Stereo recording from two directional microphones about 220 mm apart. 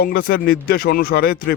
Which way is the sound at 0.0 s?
45° left (ahead or behind).